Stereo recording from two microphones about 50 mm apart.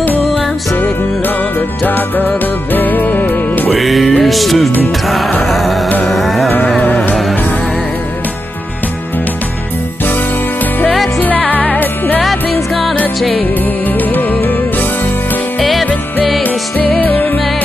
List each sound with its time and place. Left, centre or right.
0.7 s music: left
3.7 s music: centre
10.0 s music: left
11.4 s music: left
13.6 s music: left
16.4 s music: left